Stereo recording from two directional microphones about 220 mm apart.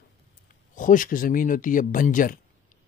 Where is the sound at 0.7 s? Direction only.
35° left (ahead or behind).